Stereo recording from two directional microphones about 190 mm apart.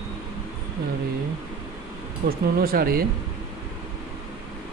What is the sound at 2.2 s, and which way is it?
Speech, 55° right (ahead or behind).